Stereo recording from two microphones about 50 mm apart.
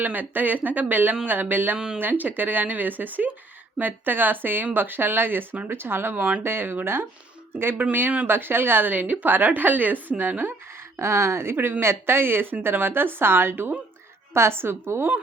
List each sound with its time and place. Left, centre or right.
0.0 s a woman's voice: right
10.9 s speech: right
11.5 s a woman's voice: right
11.8 s a woman's voice: right